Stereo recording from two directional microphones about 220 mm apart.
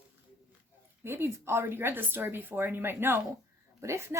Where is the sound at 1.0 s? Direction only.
10° right (ahead or behind).